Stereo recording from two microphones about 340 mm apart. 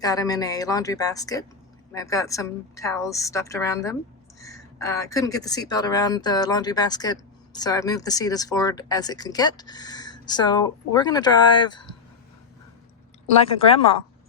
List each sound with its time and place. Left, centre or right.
0.0 s speech: centre